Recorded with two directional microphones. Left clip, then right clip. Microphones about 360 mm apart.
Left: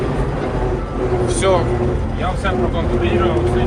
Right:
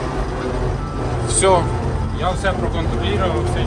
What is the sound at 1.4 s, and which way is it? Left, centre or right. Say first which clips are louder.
Speech: right 2 dB; centre.